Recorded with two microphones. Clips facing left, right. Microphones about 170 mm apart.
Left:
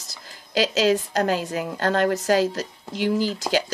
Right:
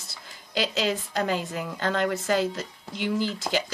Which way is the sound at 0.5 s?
90° left.